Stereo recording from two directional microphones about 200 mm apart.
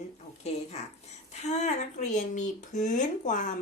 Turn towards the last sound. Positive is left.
turn(degrees=40)  # may be behind; listen again after turning